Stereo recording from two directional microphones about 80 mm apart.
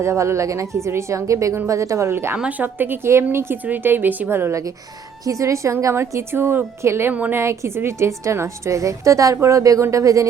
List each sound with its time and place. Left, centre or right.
0.0 s a woman's voice: right
2.4 s a woman's voice: centre
5.2 s a woman's voice: right
7.1 s a woman's voice: centre
7.3 s a woman's voice: right